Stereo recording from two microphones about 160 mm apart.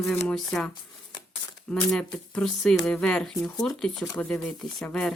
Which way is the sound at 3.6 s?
Centre (ahead or behind).